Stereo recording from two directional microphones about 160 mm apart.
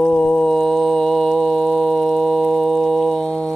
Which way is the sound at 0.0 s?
5° left (ahead or behind).